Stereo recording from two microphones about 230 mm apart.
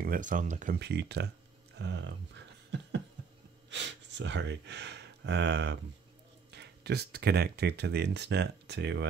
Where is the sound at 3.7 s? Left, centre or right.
Right.